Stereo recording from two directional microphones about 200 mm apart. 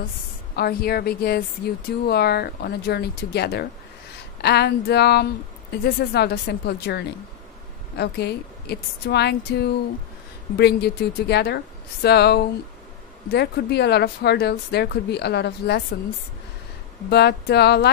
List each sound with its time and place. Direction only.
0.6 s a woman's voice: 50° left (ahead or behind)
17.1 s a woman's voice: 55° left (ahead or behind)